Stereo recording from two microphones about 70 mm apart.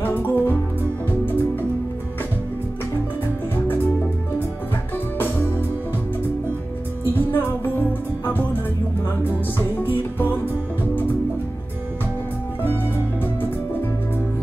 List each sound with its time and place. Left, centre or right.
0.0 s music: left
7.2 s music: left
9.6 s music: left